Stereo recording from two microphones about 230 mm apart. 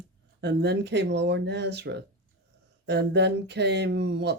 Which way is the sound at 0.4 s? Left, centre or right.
Right.